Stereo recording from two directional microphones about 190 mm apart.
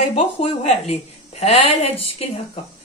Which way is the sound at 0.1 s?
35° left (ahead or behind).